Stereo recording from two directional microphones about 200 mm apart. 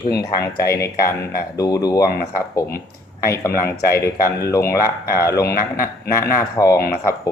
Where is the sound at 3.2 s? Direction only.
15° left (ahead or behind).